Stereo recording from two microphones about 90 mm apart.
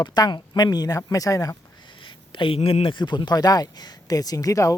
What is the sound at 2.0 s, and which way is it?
Speech, 70° left (ahead or behind).